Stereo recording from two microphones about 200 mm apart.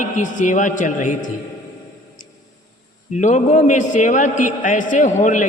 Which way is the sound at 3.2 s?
40° left (ahead or behind).